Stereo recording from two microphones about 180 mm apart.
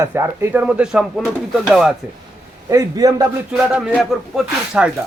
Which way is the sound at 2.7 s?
20° right (ahead or behind).